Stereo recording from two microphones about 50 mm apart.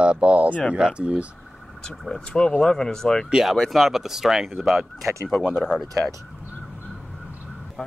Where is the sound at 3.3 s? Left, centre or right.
Centre.